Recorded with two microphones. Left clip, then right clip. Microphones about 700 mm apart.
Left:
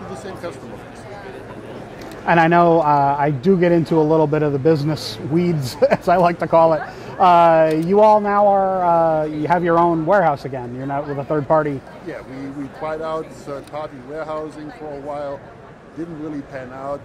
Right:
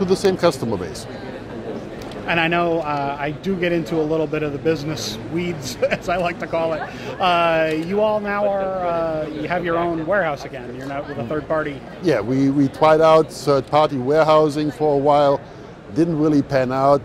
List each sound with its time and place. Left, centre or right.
0.2 s speech: right
2.2 s speech: left
12.8 s speech: right